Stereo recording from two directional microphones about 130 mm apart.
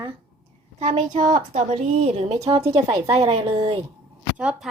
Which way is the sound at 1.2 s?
75° right (ahead or behind).